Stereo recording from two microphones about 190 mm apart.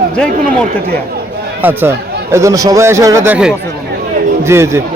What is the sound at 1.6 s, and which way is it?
Speech, 10° right (ahead or behind).